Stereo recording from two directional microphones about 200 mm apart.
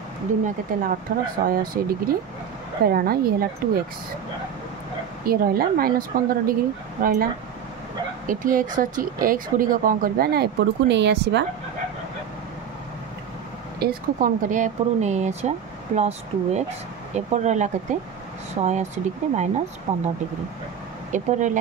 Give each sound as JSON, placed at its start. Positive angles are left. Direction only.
{"t": 0.7, "sound": "speech", "side_deg": -45}
{"t": 5.2, "sound": "speech", "side_deg": -45}
{"t": 8.3, "sound": "speech", "side_deg": -40}
{"t": 13.7, "sound": "speech", "side_deg": -45}
{"t": 21.1, "sound": "speech", "side_deg": -35}